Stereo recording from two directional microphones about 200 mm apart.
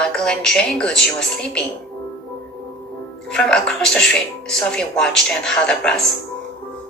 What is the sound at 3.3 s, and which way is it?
A woman's voice, 5° left (ahead or behind).